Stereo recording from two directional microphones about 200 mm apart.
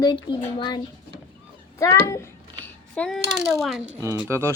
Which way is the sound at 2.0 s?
15° left (ahead or behind).